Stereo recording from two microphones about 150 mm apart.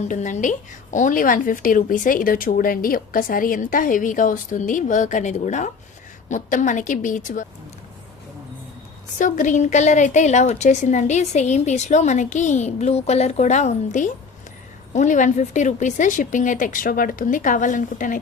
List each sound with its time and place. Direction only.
0.1 s a woman's voice: 55° left (ahead or behind)
9.1 s a woman's voice: 60° left (ahead or behind)